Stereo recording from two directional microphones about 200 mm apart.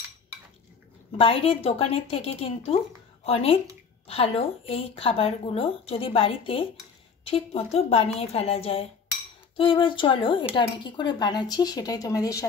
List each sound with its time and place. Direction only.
1.1 s speech: 25° left (ahead or behind)